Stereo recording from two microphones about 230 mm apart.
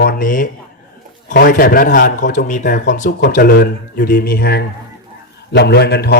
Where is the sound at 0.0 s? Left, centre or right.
Left.